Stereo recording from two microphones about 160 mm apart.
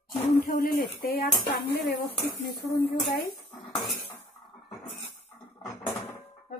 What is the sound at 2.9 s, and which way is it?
Speech, 75° left (ahead or behind).